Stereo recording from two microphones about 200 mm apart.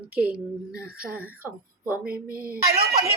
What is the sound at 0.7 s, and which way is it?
Speech, 50° right (ahead or behind).